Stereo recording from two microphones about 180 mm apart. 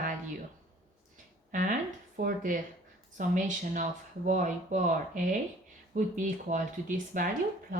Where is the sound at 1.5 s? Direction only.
45° right (ahead or behind).